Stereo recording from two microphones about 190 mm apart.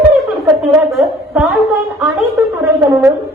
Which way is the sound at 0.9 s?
Centre (ahead or behind).